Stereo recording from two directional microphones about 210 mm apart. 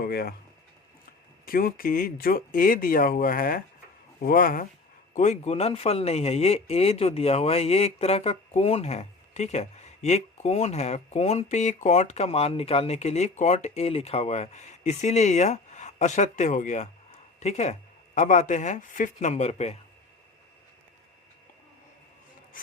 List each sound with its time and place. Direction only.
0.0 s speech: 45° left (ahead or behind)
1.5 s speech: 45° left (ahead or behind)